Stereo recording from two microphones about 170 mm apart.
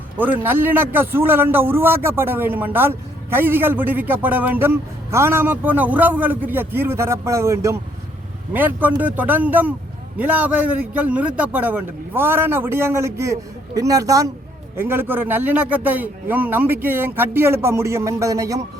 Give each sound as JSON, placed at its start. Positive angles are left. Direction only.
{"t": 0.2, "sound": "a man's voice", "side_deg": -10}